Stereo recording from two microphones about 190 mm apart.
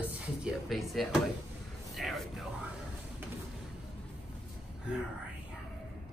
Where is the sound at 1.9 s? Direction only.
Centre (ahead or behind).